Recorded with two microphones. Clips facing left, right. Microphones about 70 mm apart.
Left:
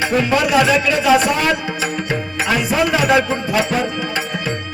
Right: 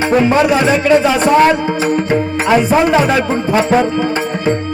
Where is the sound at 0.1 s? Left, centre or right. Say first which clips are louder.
Right 6 dB; right.